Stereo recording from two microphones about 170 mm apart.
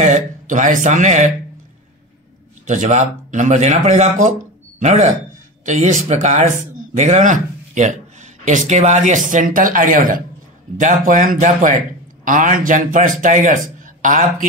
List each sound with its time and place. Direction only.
0.0 s speech: 50° right (ahead or behind)
2.6 s speech: 45° right (ahead or behind)